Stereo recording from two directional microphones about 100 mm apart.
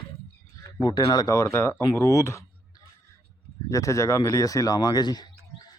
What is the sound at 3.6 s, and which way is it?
Speech, 35° left (ahead or behind).